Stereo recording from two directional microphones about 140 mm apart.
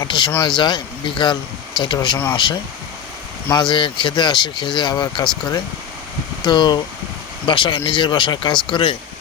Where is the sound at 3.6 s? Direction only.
35° left (ahead or behind).